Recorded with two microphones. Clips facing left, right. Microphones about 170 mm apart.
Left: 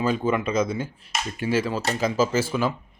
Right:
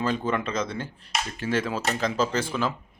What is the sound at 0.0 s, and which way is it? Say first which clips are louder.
Speech: left 3 dB; 10° left (ahead or behind).